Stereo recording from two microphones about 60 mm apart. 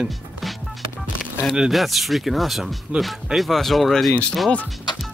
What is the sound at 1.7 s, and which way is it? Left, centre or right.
Speech, centre.